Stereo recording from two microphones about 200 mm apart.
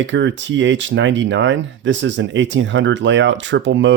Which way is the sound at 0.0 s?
65° right (ahead or behind).